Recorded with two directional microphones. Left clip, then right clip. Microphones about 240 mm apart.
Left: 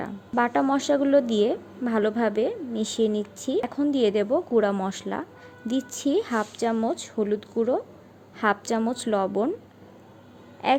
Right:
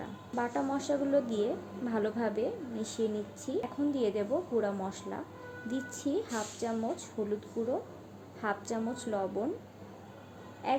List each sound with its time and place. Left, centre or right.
0.0 s a woman's voice: left
10.6 s a woman's voice: left